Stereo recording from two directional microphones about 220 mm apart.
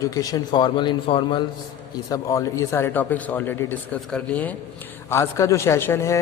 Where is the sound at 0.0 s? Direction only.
15° left (ahead or behind).